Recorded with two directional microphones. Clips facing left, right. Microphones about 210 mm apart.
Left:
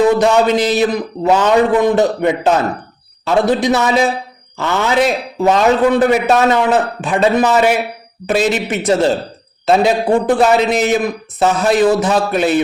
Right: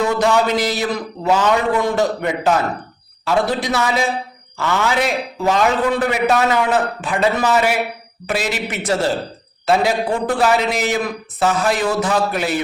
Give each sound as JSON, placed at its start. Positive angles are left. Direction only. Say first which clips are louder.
{"t": 0.2, "sound": "a man's voice", "louder": "left 4 dB", "side_deg": 20}